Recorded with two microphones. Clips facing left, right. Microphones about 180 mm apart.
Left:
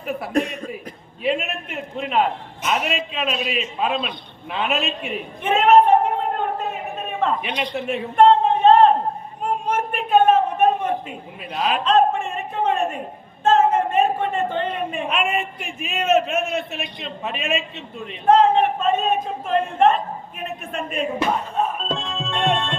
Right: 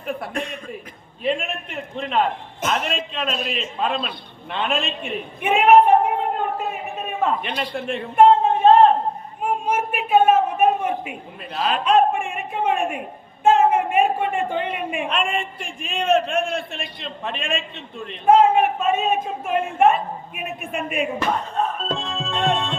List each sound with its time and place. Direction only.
0.0 s a man's voice: 5° left (ahead or behind)
0.3 s a man's voice: 40° left (ahead or behind)
1.2 s a man's voice: 5° left (ahead or behind)
5.4 s a woman's voice: 10° right (ahead or behind)
7.5 s a man's voice: 5° right (ahead or behind)
8.6 s a sound: 5° right (ahead or behind)
11.5 s a man's voice: centre (ahead or behind)
11.9 s a sound: 10° right (ahead or behind)
15.1 s a man's voice: 5° left (ahead or behind)
18.3 s a man's voice: 10° right (ahead or behind)
21.2 s speech: 10° left (ahead or behind)
21.9 s music: centre (ahead or behind)